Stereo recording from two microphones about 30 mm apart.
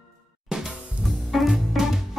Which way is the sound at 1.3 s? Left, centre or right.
Centre.